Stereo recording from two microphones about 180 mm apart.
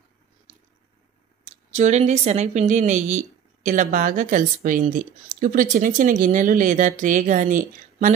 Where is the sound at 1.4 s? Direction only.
40° right (ahead or behind).